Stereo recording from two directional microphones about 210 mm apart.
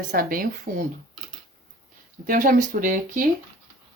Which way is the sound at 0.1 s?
45° right (ahead or behind).